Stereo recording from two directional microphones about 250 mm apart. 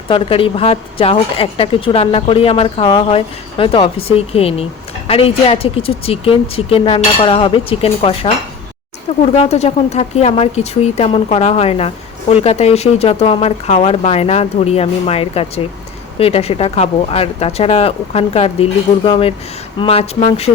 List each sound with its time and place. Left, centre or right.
0.1 s speech: left